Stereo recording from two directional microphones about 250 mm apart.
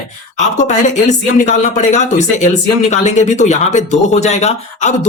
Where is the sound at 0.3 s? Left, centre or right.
Left.